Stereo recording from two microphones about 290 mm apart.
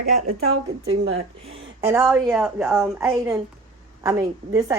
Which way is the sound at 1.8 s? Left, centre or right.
Centre.